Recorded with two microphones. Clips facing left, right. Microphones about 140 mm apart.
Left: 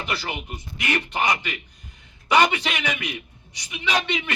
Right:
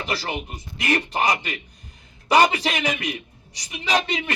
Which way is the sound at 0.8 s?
35° right (ahead or behind).